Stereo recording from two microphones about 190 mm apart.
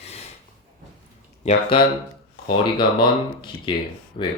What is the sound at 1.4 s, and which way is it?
Speech, 25° left (ahead or behind).